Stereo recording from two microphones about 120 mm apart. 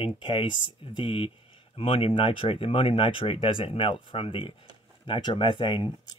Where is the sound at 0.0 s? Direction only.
45° left (ahead or behind).